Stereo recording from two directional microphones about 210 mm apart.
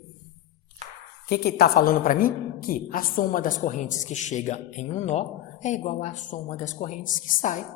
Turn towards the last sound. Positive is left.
turn(degrees=40)  # may be behind; listen again after turning